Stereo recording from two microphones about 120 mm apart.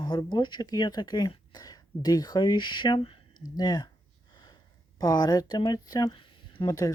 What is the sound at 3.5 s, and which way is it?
Speech, 35° left (ahead or behind).